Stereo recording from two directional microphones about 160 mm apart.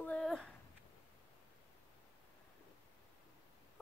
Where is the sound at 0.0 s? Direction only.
5° left (ahead or behind).